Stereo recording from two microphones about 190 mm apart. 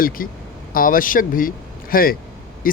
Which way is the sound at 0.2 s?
50° left (ahead or behind).